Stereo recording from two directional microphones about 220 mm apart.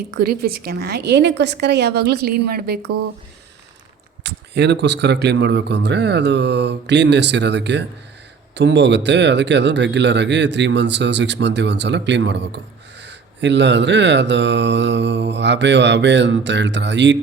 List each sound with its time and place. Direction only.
0.2 s speech: 45° right (ahead or behind)
4.2 s speech: 50° right (ahead or behind)